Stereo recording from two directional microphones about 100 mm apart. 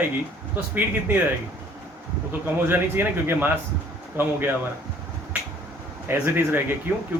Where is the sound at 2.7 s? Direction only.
20° right (ahead or behind).